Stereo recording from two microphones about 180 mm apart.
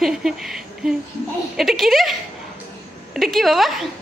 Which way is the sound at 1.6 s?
Centre (ahead or behind).